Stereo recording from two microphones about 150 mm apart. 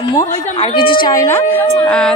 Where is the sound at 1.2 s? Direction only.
15° left (ahead or behind).